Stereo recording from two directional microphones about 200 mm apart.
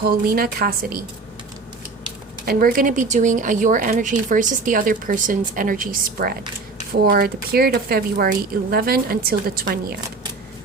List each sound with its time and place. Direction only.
0.0 s speech: 45° right (ahead or behind)
2.5 s speech: 45° right (ahead or behind)